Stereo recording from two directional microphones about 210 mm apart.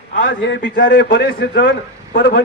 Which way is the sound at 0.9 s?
45° left (ahead or behind).